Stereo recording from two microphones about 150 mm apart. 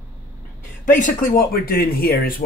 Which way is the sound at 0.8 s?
60° left (ahead or behind).